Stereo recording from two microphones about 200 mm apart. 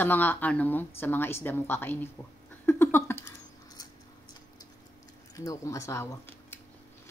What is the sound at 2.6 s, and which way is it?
Rodents, 10° left (ahead or behind).